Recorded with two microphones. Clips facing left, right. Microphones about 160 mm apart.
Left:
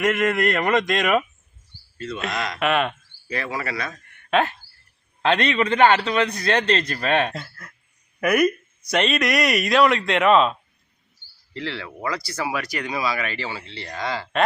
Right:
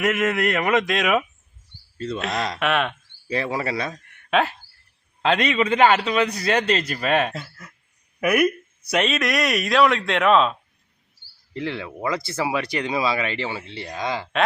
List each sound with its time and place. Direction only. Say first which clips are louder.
0.0 s speech: left 1 dB; 5° right (ahead or behind)
3.2 s speech: right 3 dB; 30° right (ahead or behind)
4.1 s cricket: left 1 dB; centre (ahead or behind)
5.2 s a man's voice: even; 5° right (ahead or behind)
11.5 s a man's voice: right 3 dB; 20° right (ahead or behind)